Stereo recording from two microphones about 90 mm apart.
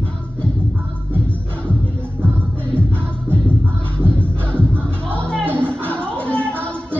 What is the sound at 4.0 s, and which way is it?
Music, 15° left (ahead or behind).